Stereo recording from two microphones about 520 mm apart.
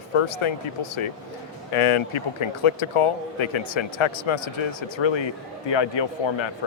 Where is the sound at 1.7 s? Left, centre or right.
Left.